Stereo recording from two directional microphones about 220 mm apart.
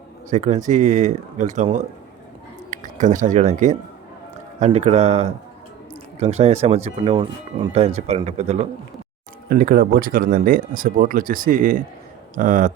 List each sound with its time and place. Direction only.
0.3 s speech: 35° right (ahead or behind)
9.5 s speech: 40° right (ahead or behind)